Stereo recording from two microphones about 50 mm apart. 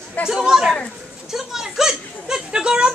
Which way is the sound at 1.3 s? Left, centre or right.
Centre.